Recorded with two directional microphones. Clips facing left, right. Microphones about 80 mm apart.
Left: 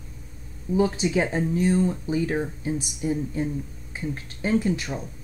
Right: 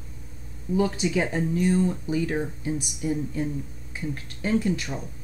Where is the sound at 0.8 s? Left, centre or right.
Left.